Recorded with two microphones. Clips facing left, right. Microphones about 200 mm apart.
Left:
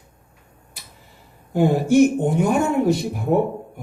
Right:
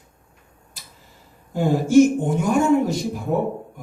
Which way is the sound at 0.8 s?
60° left (ahead or behind).